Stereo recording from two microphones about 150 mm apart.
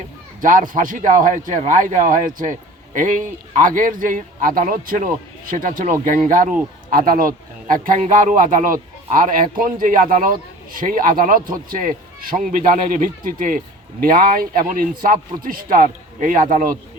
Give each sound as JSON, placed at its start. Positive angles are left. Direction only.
{"t": 0.4, "sound": "speech", "side_deg": -65}
{"t": 6.9, "sound": "speech", "side_deg": -70}